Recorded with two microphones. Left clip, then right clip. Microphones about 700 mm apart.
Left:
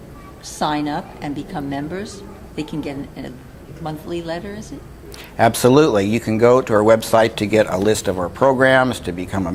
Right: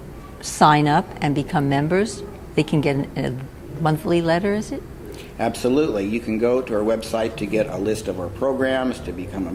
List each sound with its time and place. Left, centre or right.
0.4 s a woman's voice: right
5.4 s speech: left